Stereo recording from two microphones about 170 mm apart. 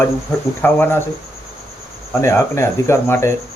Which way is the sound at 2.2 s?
15° left (ahead or behind).